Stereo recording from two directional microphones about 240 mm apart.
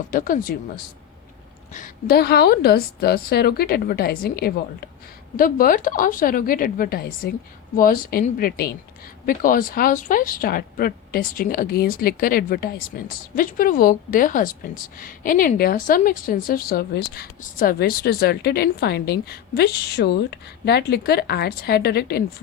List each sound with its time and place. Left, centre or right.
0.1 s speech: left
1.7 s speech: left